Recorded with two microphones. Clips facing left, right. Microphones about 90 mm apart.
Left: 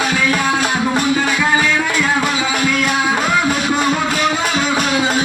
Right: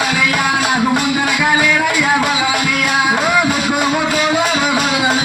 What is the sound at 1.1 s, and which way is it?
Music, 15° right (ahead or behind).